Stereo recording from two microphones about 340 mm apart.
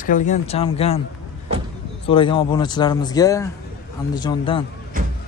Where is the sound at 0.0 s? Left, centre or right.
Left.